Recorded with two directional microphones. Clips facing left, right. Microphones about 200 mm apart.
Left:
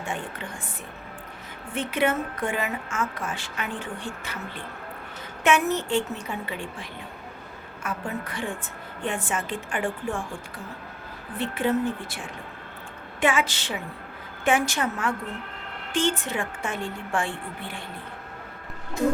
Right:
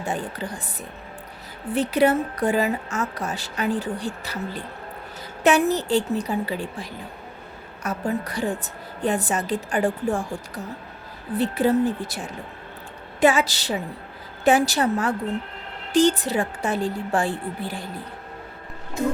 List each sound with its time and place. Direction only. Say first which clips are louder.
0.0 s a woman's voice: right 5 dB; 35° right (ahead or behind)
1.7 s a woman's voice: right 6 dB; 35° right (ahead or behind)